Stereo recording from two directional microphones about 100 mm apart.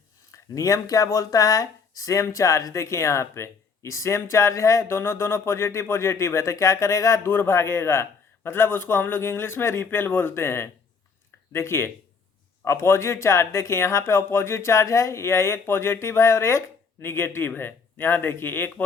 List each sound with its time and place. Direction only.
0.3 s speech: 30° left (ahead or behind)